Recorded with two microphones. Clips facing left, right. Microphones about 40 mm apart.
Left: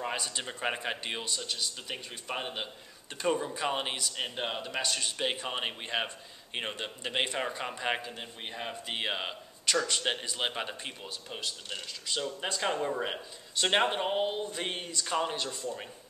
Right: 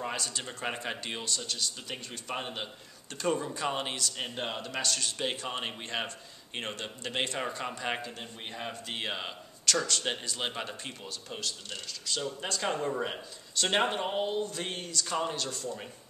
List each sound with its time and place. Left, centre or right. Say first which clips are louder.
0.1 s speech: left 1 dB; centre
12.7 s speech: even; centre
13.0 s speech: even; centre